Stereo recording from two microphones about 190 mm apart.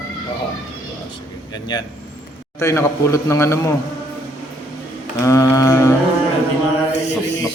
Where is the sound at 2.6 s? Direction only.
15° left (ahead or behind).